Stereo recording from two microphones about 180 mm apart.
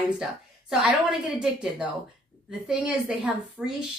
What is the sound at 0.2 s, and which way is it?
A woman's voice, 5° right (ahead or behind).